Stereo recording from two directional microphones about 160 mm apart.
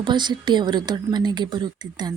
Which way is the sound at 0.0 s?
30° right (ahead or behind).